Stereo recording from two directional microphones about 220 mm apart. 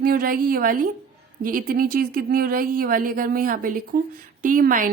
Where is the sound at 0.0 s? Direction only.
40° right (ahead or behind).